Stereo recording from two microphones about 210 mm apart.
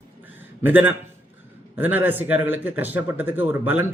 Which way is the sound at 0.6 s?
10° right (ahead or behind).